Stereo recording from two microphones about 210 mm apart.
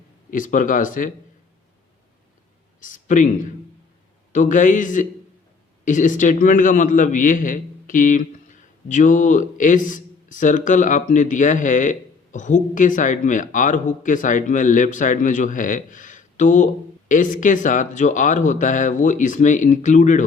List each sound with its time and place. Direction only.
0.3 s a man's voice: 40° left (ahead or behind)
2.8 s a man's voice: 40° left (ahead or behind)